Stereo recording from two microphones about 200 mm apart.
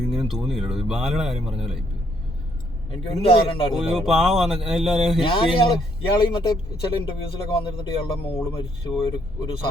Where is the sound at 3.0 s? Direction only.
25° left (ahead or behind).